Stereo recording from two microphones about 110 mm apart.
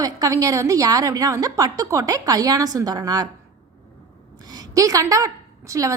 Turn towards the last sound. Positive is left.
turn(degrees=-30)  # may be behind; listen again after turning